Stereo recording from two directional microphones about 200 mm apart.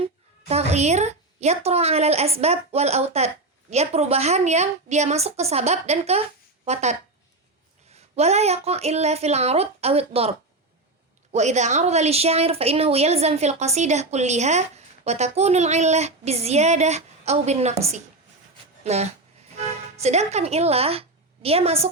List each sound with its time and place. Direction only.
0.0 s a woman's voice: 30° right (ahead or behind)
7.9 s a woman's voice: 30° right (ahead or behind)